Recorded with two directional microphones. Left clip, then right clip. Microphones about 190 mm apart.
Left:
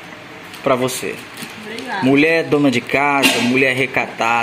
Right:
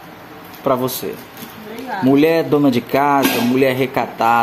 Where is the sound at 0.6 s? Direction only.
10° right (ahead or behind).